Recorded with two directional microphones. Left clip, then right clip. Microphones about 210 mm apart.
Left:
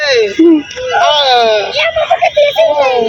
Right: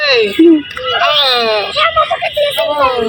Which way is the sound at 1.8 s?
10° right (ahead or behind).